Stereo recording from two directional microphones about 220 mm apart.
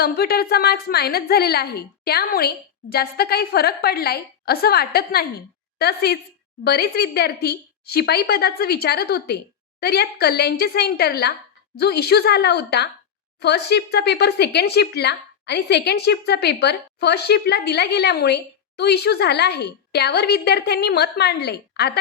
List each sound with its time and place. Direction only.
0.0 s speech: 45° left (ahead or behind)